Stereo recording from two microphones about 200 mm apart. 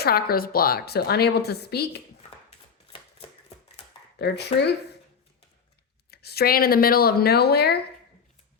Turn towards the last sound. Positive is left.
turn(degrees=55)  # may be behind; listen again after turning